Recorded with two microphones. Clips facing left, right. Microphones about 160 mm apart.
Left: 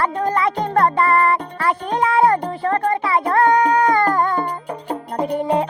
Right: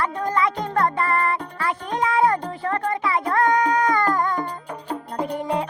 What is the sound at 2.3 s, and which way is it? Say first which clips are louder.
Music: left 5 dB; 35° left (ahead or behind).